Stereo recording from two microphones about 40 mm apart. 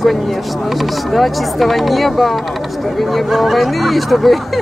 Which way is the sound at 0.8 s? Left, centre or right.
Centre.